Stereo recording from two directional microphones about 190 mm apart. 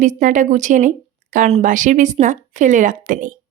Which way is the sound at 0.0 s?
40° right (ahead or behind).